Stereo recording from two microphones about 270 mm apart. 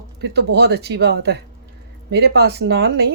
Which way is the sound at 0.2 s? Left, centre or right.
Right.